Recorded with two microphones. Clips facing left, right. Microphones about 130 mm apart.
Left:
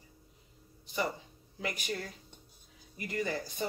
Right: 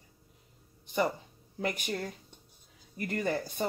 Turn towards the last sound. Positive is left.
turn(degrees=-55)  # may be behind; listen again after turning